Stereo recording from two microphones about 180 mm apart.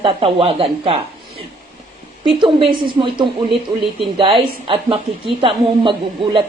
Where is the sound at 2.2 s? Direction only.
30° right (ahead or behind).